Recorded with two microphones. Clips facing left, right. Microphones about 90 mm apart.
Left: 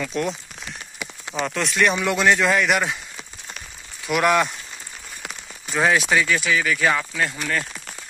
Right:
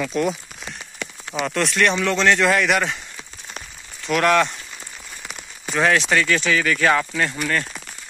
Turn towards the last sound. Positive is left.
turn(degrees=5)  # may be behind; listen again after turning